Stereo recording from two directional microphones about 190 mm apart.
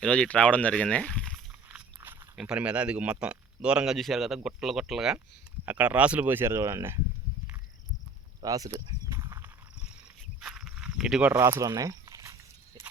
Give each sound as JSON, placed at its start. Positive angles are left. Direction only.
{"t": 0.0, "sound": "speech", "side_deg": 5}
{"t": 2.0, "sound": "speech", "side_deg": -10}
{"t": 8.4, "sound": "a sound", "side_deg": -20}